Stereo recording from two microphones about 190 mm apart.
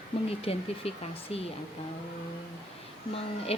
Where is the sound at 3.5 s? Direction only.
30° left (ahead or behind).